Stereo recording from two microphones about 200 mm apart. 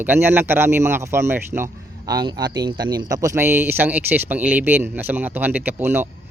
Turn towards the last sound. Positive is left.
turn(degrees=-10)  # may be behind; listen again after turning